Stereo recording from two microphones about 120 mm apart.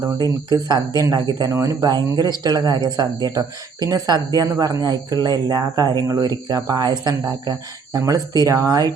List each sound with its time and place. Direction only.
0.2 s speech: 35° right (ahead or behind)